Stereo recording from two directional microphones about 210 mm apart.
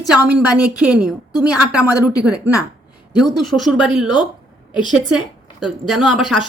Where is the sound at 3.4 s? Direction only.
Centre (ahead or behind).